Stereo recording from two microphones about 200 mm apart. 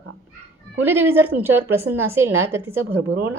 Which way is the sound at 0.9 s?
10° right (ahead or behind).